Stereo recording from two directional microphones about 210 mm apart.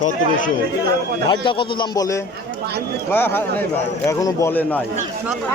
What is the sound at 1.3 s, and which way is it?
Speech, 25° left (ahead or behind).